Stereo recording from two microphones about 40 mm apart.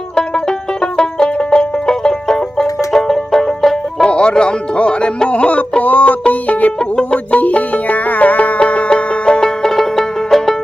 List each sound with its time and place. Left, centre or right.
0.2 s banjo: left
4.1 s music: left
9.6 s music: centre